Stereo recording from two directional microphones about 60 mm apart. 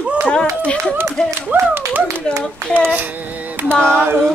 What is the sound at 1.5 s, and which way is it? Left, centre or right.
Child singing, right.